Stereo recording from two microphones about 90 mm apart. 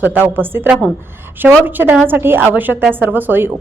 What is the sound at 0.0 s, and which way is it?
A woman's voice, 20° right (ahead or behind).